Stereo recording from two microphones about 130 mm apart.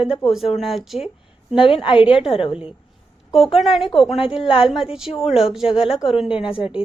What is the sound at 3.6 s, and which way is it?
Speech, centre (ahead or behind).